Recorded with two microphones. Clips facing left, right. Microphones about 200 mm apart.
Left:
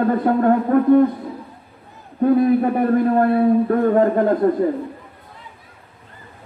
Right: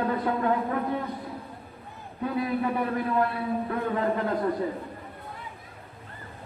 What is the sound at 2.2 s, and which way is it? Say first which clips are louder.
A man's voice: left 12 dB; 50° left (ahead or behind).